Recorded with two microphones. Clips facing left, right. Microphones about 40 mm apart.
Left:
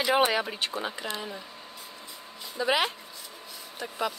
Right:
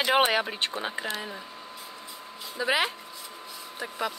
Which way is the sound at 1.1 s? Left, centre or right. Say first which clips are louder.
Right 1 dB; centre.